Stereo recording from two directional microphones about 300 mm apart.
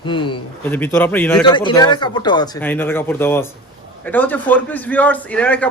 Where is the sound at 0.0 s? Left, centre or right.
Centre.